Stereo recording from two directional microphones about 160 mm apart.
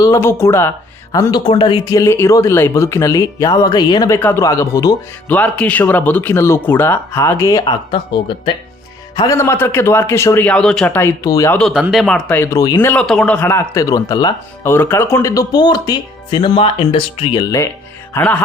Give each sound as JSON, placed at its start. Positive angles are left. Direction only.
{"t": 0.0, "sound": "a man's voice", "side_deg": 15}
{"t": 4.2, "sound": "a man's voice", "side_deg": 15}
{"t": 5.3, "sound": "a man's voice", "side_deg": 10}
{"t": 7.6, "sound": "a man's voice", "side_deg": 30}
{"t": 11.5, "sound": "speech", "side_deg": 5}
{"t": 12.4, "sound": "speech", "side_deg": 20}
{"t": 12.8, "sound": "a man's voice", "side_deg": 10}
{"t": 14.6, "sound": "speech", "side_deg": 15}
{"t": 18.1, "sound": "a man's voice", "side_deg": 10}